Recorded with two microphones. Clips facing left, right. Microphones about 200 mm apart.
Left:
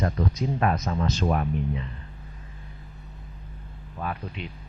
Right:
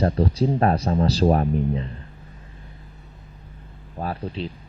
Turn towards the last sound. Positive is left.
turn(degrees=-30)  # may be behind; listen again after turning